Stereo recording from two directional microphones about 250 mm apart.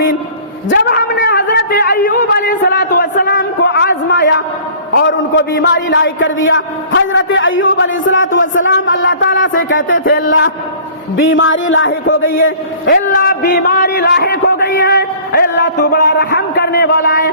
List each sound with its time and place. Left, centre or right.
0.7 s a man's voice: left
3.2 s a sound: left
4.9 s a man's voice: left
13.1 s a man's voice: left